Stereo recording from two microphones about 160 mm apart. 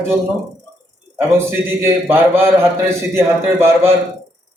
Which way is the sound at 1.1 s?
15° right (ahead or behind).